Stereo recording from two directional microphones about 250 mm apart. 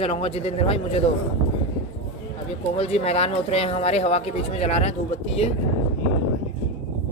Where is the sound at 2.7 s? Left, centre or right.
Left.